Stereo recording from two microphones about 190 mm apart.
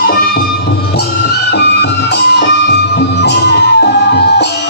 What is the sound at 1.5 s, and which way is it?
Music, 60° left (ahead or behind).